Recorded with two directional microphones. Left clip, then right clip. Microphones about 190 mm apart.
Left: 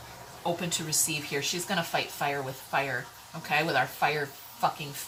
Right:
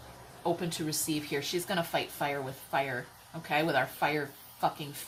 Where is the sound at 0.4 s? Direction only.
15° right (ahead or behind).